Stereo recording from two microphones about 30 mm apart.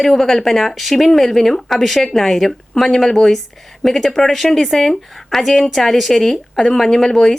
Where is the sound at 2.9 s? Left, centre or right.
Centre.